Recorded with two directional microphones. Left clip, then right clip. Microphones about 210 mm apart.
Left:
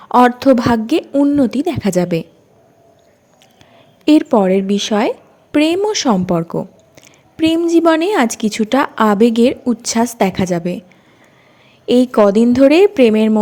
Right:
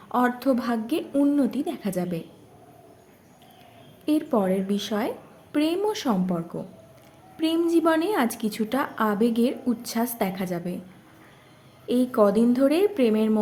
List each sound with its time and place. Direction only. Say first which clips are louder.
0.1 s a woman's voice: left 13 dB; 35° left (ahead or behind)
4.0 s a woman's voice: left 12 dB; 35° left (ahead or behind)
11.9 s a woman's voice: left 10 dB; 35° left (ahead or behind)